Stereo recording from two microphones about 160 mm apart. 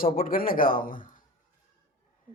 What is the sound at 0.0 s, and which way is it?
Mantra, 65° left (ahead or behind).